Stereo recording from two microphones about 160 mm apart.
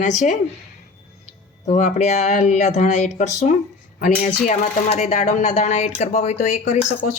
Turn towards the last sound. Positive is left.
turn(degrees=50)  # may be behind; listen again after turning